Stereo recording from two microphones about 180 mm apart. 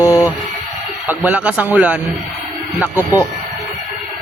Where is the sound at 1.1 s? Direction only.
5° right (ahead or behind).